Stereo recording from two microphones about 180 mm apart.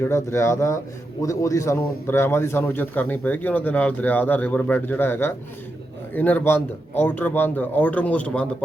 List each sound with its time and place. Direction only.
0.0 s a man's voice: 15° left (ahead or behind)